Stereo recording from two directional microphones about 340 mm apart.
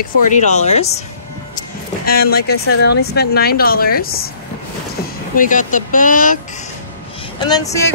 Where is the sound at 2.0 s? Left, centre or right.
Left.